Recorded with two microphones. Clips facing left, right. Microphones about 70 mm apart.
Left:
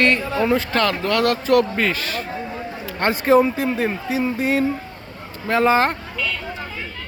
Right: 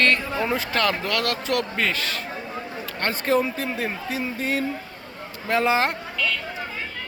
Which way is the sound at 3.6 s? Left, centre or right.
Centre.